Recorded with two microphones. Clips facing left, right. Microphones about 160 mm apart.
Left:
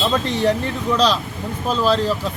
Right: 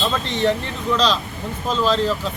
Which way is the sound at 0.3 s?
10° left (ahead or behind).